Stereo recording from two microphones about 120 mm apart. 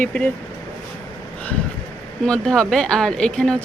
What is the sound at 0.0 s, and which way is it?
Speech, 10° left (ahead or behind).